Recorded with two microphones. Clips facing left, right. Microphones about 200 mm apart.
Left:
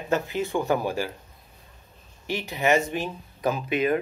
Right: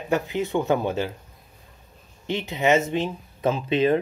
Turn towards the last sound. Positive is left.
turn(degrees=-30)  # may be behind; listen again after turning